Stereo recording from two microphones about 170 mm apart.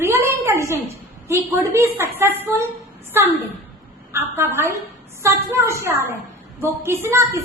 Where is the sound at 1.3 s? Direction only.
15° right (ahead or behind).